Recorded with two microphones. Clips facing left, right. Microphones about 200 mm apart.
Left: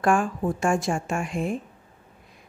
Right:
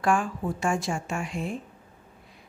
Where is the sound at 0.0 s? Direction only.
50° left (ahead or behind).